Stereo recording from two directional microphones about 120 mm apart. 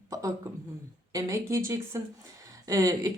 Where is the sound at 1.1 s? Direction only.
25° right (ahead or behind).